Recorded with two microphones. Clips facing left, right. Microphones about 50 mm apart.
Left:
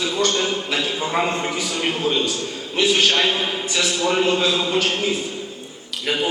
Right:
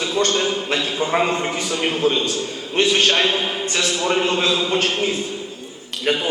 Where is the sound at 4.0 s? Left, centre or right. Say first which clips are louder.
Left 1 dB; centre.